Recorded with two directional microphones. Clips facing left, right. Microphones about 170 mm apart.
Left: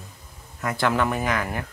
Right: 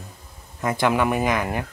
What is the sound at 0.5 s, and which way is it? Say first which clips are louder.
Speech: right 2 dB; 20° right (ahead or behind).